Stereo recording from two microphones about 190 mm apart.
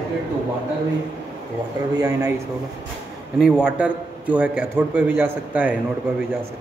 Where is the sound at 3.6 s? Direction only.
5° right (ahead or behind).